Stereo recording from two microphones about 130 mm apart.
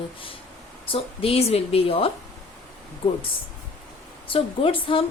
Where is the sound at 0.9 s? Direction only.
45° left (ahead or behind).